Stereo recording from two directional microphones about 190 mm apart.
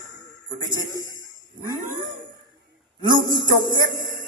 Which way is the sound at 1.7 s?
20° right (ahead or behind).